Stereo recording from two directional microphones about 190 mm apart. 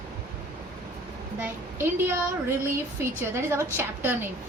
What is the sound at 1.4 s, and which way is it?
A woman's voice, 10° right (ahead or behind).